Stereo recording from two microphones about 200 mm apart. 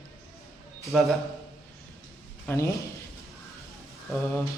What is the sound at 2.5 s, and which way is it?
Speech, 15° left (ahead or behind).